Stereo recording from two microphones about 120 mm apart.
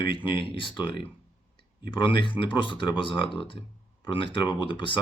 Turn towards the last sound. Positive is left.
turn(degrees=45)  # may be behind; listen again after turning